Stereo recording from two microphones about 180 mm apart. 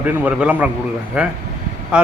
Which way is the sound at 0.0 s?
5° right (ahead or behind).